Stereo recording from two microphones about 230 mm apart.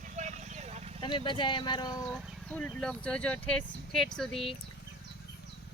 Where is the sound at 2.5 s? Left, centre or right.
Centre.